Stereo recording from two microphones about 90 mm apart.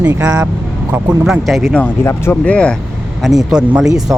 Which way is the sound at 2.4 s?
15° left (ahead or behind).